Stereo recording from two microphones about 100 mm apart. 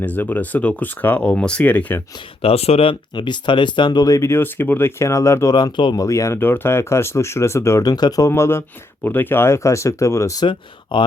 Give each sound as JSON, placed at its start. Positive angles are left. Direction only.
{"t": 0.0, "sound": "speech", "side_deg": 15}
{"t": 2.4, "sound": "speech", "side_deg": 90}
{"t": 3.2, "sound": "speech", "side_deg": 50}
{"t": 5.5, "sound": "speech", "side_deg": 45}
{"t": 6.1, "sound": "speech", "side_deg": 30}
{"t": 8.3, "sound": "speech", "side_deg": 25}
{"t": 10.4, "sound": "speech", "side_deg": 55}